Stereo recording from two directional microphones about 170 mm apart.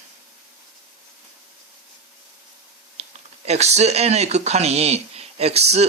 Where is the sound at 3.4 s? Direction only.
40° right (ahead or behind).